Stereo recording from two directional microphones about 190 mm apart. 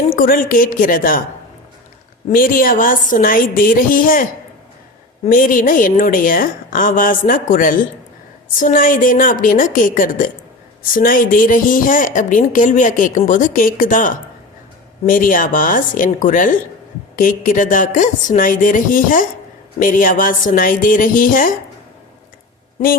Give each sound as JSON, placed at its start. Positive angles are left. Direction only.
{"t": 0.2, "sound": "a woman's voice", "side_deg": 45}
{"t": 2.3, "sound": "a woman's voice", "side_deg": 50}